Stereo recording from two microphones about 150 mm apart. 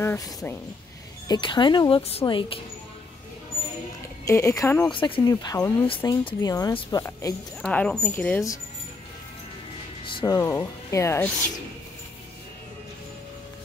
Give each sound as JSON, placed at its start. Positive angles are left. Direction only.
{"t": 0.0, "sound": "speech", "side_deg": 20}
{"t": 4.3, "sound": "speech", "side_deg": 20}
{"t": 4.9, "sound": "speech", "side_deg": 30}
{"t": 6.7, "sound": "speech", "side_deg": 35}
{"t": 7.0, "sound": "speech", "side_deg": 20}
{"t": 7.6, "sound": "speech", "side_deg": 5}
{"t": 10.0, "sound": "speech", "side_deg": 30}